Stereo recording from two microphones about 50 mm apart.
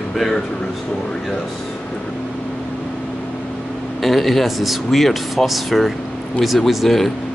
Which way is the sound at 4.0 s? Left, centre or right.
Centre.